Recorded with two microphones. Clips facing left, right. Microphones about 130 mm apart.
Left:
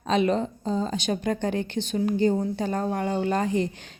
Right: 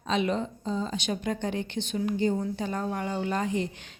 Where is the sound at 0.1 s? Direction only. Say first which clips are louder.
Left 4 dB; 40° left (ahead or behind).